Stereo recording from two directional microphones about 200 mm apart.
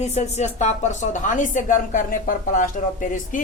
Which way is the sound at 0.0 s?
35° left (ahead or behind).